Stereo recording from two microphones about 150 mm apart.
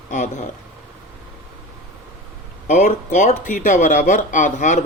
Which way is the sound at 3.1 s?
50° left (ahead or behind).